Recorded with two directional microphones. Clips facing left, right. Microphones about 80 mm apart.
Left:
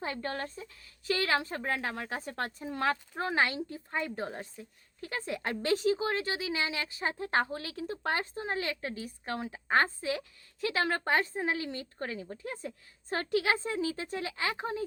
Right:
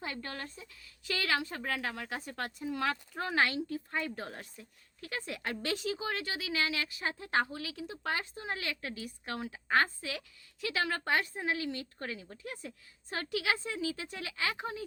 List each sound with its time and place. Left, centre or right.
0.0 s speech: left